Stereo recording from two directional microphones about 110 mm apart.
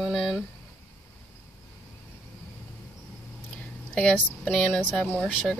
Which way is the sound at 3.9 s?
10° left (ahead or behind).